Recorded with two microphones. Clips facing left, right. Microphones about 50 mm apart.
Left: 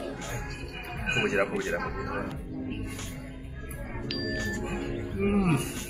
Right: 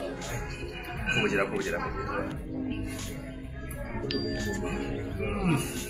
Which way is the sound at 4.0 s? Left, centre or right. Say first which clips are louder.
Even; centre.